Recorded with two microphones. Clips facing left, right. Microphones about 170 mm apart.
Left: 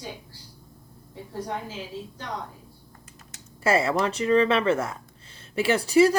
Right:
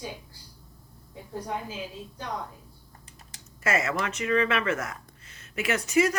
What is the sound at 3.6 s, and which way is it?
Speech, 30° left (ahead or behind).